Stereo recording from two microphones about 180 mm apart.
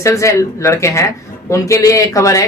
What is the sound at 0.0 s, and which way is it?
A woman's voice, 15° left (ahead or behind).